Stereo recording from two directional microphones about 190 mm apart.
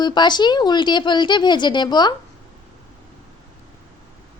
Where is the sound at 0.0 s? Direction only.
25° left (ahead or behind).